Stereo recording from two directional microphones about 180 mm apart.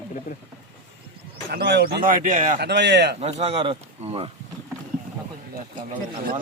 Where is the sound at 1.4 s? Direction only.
65° right (ahead or behind).